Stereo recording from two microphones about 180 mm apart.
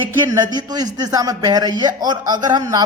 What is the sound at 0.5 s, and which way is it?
A man's voice, 20° right (ahead or behind).